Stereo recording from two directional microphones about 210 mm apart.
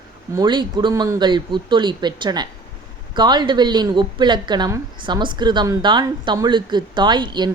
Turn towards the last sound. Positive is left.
turn(degrees=-20)  # may be behind; listen again after turning